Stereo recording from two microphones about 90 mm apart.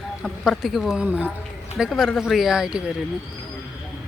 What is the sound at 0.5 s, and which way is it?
Speech, centre (ahead or behind).